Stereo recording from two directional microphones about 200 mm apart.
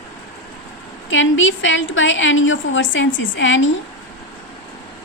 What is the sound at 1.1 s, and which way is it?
A woman's voice, 70° left (ahead or behind).